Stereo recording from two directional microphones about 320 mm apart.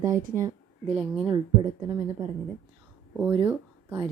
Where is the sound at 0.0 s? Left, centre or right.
Right.